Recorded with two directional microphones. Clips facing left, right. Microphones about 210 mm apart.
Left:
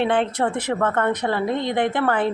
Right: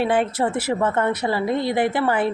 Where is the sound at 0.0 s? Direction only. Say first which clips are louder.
Even; 5° right (ahead or behind).